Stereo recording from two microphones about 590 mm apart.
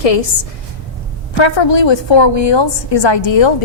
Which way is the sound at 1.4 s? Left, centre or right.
Left.